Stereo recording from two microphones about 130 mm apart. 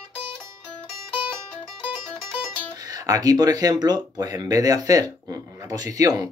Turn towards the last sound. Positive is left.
turn(degrees=-25)  # may be behind; listen again after turning